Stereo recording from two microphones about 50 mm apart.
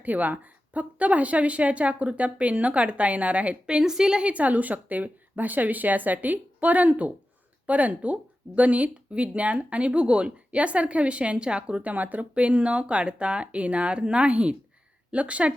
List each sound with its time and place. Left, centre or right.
0.0 s speech: right; by 4.3 s centre
4.3 s speech: right